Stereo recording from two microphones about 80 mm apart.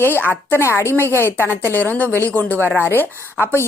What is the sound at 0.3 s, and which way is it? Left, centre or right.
A woman's voice, left.